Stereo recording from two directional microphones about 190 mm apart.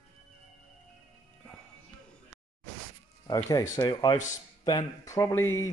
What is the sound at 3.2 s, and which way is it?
Speech, 20° left (ahead or behind).